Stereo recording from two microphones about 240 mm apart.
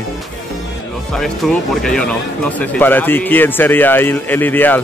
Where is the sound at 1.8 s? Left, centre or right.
Centre.